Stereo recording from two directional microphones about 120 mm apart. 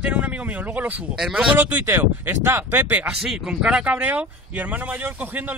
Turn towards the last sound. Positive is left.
turn(degrees=-15)  # may be behind; listen again after turning